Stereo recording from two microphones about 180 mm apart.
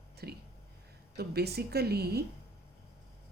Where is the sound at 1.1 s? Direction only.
60° right (ahead or behind).